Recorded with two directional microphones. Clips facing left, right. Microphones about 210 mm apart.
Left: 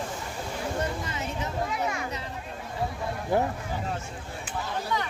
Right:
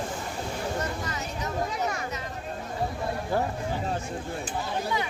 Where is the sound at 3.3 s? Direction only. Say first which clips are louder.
Left 3 dB; 20° left (ahead or behind).